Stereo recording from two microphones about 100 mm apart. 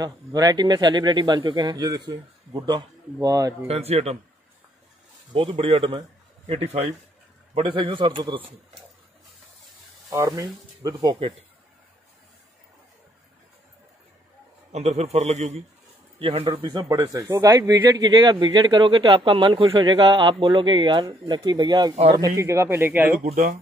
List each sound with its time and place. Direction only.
0.0 s speech: 40° right (ahead or behind)
3.6 s a man's voice: 90° right
5.3 s a man's voice: 55° right (ahead or behind)
5.6 s speech: 65° right (ahead or behind)
6.5 s a man's voice: 90° right
7.6 s a man's voice: 55° right (ahead or behind)
10.0 s speech: 35° right (ahead or behind)
14.7 s a man's voice: 90° right
16.2 s speech: 70° right (ahead or behind)
16.6 s speech: 40° right (ahead or behind)
17.1 s speech: 35° right (ahead or behind); by 19.6 s 60° right (ahead or behind)
19.8 s a man's voice: 45° right (ahead or behind); by 23.1 s 25° right (ahead or behind)